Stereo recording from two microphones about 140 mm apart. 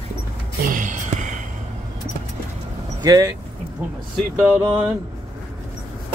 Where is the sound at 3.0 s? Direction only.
25° right (ahead or behind).